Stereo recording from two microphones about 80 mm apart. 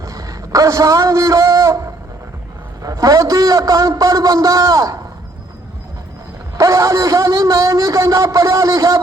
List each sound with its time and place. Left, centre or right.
0.0 s a sound: right
2.8 s a man's voice: right
6.6 s a man's voice: right